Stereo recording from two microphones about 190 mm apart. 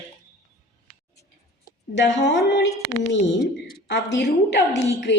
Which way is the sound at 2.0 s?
65° left (ahead or behind).